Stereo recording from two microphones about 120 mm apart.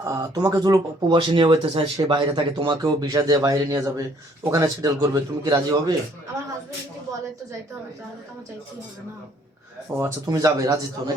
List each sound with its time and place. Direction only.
0.0 s speech: 25° right (ahead or behind)
0.5 s speech: 35° right (ahead or behind)
9.9 s speech: 20° right (ahead or behind)